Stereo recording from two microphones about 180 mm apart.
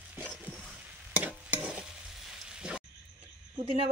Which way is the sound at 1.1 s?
10° right (ahead or behind).